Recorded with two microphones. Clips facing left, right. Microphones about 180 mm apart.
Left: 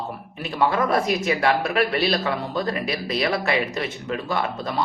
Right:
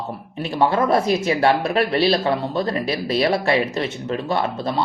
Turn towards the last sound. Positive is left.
turn(degrees=-25)  # may be behind; listen again after turning